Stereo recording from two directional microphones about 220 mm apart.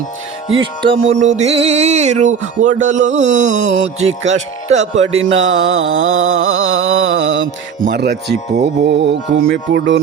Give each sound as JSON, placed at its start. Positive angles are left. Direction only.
{"t": 0.6, "sound": "music", "side_deg": -25}
{"t": 3.5, "sound": "mantra", "side_deg": -60}
{"t": 4.0, "sound": "music", "side_deg": -30}
{"t": 5.3, "sound": "mantra", "side_deg": -55}
{"t": 7.8, "sound": "music", "side_deg": -45}